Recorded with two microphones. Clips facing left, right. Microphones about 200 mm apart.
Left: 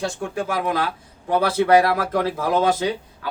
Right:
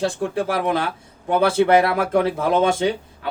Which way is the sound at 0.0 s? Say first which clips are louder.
Right 4 dB; 35° right (ahead or behind).